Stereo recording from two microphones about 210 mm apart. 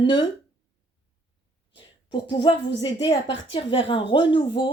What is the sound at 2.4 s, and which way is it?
Speech, 20° left (ahead or behind).